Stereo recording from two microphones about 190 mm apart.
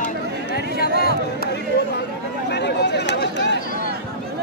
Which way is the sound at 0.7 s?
55° left (ahead or behind).